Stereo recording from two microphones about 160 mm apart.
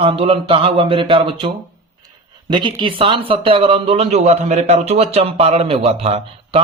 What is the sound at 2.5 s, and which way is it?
Speech, 30° right (ahead or behind).